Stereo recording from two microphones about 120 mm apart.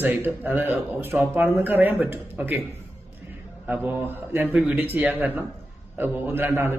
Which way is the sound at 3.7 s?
15° right (ahead or behind).